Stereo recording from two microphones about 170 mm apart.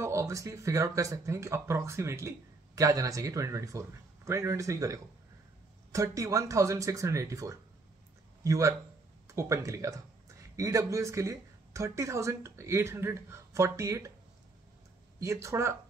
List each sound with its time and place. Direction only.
0.0 s speech: 15° right (ahead or behind)
15.1 s speech: 15° right (ahead or behind)